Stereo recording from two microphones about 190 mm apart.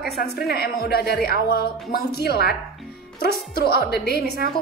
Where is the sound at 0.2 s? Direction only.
55° left (ahead or behind).